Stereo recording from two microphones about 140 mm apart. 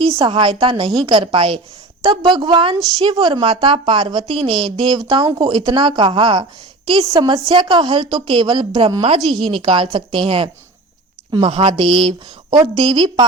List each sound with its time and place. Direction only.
0.1 s a woman's voice: 40° right (ahead or behind)
9.0 s a woman's voice: 45° right (ahead or behind)
9.2 s speech: centre (ahead or behind)
9.5 s a woman's voice: 40° right (ahead or behind)